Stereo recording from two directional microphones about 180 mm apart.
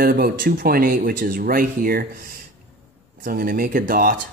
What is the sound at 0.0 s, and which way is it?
Speech, 55° right (ahead or behind).